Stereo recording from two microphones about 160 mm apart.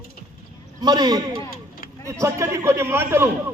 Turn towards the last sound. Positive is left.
turn(degrees=-15)  # may be behind; listen again after turning